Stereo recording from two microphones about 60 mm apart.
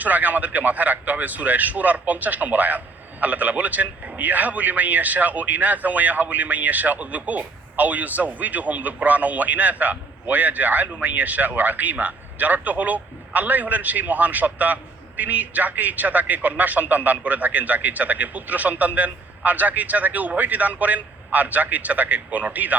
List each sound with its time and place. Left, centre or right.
0.0 s a man's voice: right